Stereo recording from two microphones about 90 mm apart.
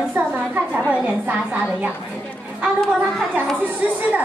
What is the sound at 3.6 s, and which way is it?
Speech, 20° right (ahead or behind).